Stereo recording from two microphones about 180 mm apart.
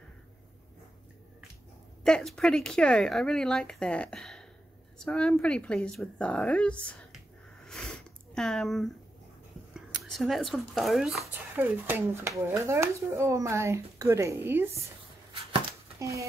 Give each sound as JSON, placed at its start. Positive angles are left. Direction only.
{"t": 2.0, "sound": "speech", "side_deg": 5}
{"t": 8.4, "sound": "speech", "side_deg": 0}
{"t": 10.0, "sound": "speech", "side_deg": 0}
{"t": 11.5, "sound": "speech", "side_deg": -10}
{"t": 16.0, "sound": "speech", "side_deg": -15}